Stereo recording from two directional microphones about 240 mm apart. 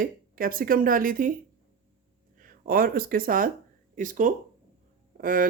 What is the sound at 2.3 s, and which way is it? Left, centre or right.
Speech, right.